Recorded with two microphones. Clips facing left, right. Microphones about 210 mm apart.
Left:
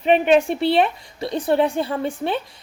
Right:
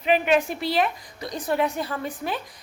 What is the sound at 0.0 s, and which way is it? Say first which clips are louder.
A woman's voice: left 5 dB; 30° left (ahead or behind).